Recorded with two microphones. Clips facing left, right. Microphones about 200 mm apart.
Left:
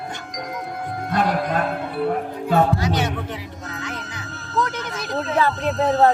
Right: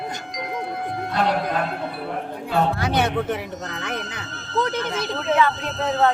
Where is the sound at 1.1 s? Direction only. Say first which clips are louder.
Left 2 dB; 50° left (ahead or behind).